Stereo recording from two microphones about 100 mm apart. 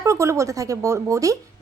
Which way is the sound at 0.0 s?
30° right (ahead or behind).